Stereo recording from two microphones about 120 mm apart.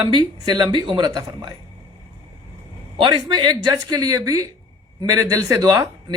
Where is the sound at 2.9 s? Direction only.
40° right (ahead or behind).